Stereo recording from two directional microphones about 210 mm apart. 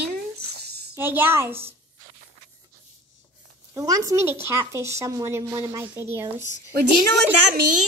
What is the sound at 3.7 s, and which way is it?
Speech, 15° right (ahead or behind).